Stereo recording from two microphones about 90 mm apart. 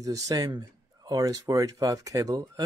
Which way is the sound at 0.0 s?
40° right (ahead or behind).